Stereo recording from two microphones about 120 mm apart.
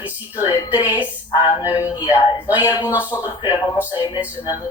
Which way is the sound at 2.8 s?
20° left (ahead or behind).